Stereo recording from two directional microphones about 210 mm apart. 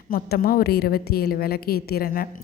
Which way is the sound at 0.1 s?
45° left (ahead or behind).